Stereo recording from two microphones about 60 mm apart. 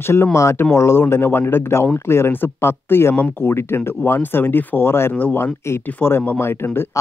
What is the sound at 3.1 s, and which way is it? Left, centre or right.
Speech, left.